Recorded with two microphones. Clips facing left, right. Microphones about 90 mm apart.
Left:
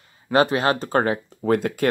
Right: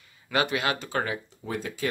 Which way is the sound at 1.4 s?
60° left (ahead or behind).